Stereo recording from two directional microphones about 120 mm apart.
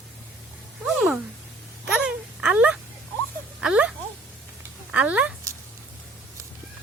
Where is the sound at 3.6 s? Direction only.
10° right (ahead or behind).